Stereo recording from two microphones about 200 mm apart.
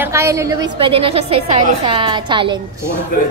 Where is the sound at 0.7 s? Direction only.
30° right (ahead or behind).